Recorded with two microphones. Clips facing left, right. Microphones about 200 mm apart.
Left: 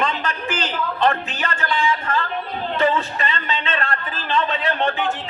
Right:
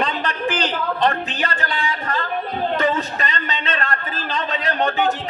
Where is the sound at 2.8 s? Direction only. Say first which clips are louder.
Left 1 dB; 40° right (ahead or behind).